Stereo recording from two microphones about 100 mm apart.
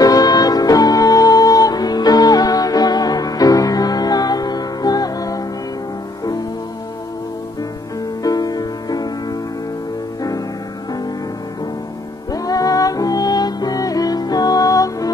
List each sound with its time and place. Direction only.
0.0 s music: 40° left (ahead or behind)
8.2 s music: 40° left (ahead or behind)
12.3 s music: 35° left (ahead or behind)